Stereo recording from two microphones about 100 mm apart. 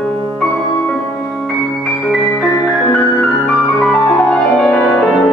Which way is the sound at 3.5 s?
10° left (ahead or behind).